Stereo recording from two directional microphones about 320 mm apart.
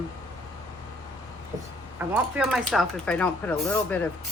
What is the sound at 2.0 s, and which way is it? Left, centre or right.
Speech, centre.